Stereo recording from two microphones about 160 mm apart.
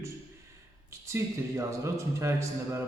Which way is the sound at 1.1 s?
15° right (ahead or behind).